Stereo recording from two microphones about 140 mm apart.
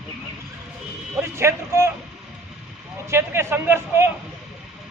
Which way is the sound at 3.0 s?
20° right (ahead or behind).